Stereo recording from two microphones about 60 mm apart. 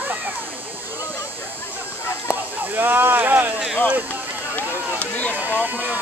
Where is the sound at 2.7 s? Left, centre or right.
Right.